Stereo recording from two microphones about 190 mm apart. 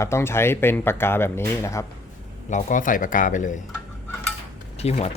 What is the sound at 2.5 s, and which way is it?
Speech, 45° left (ahead or behind).